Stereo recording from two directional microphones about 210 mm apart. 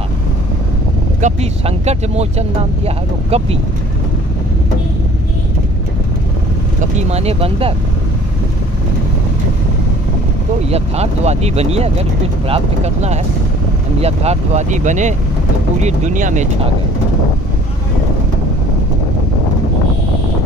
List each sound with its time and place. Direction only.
1.2 s speech: 30° right (ahead or behind)
6.8 s speech: 30° right (ahead or behind)
10.7 s speech: 30° right (ahead or behind)